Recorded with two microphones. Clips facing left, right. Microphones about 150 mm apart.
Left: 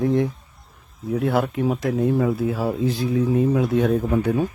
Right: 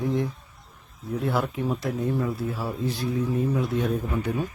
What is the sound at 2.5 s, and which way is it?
Speech, 90° left.